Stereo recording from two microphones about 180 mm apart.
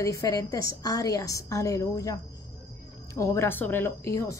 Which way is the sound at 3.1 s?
15° left (ahead or behind).